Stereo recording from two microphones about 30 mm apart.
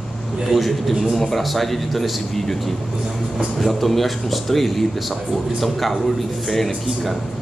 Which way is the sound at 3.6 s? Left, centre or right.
Centre.